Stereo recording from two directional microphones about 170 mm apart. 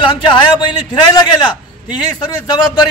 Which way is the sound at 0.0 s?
25° left (ahead or behind).